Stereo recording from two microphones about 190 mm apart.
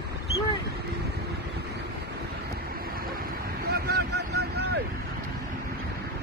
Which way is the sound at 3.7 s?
55° right (ahead or behind).